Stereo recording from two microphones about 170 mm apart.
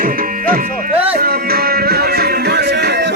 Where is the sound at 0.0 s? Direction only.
55° right (ahead or behind).